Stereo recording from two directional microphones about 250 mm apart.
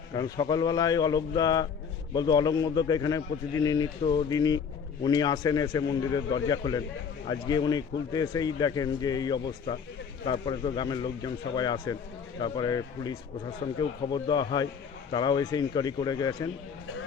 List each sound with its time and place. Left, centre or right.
0.1 s a man's voice: centre